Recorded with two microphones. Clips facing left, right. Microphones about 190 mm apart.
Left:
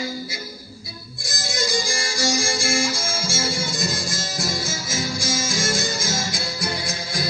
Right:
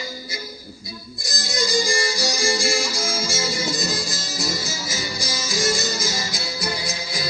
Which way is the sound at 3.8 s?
50° left (ahead or behind).